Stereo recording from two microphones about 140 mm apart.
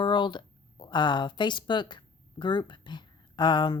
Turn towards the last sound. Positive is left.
turn(degrees=30)  # may be behind; listen again after turning